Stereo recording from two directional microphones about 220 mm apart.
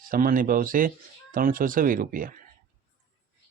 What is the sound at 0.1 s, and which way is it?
Speech, 40° right (ahead or behind).